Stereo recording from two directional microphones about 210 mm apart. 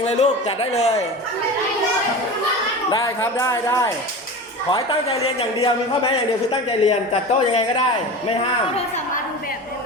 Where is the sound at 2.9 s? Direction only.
15° left (ahead or behind).